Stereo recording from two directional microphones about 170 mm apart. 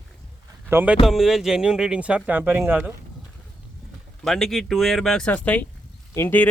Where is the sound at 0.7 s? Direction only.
10° right (ahead or behind).